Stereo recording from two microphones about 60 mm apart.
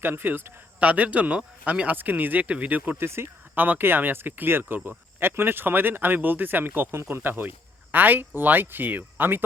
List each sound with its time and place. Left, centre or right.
0.0 s speech: right
0.8 s speech: right
2.0 s speech: right
3.0 s speech: right
3.5 s speech: right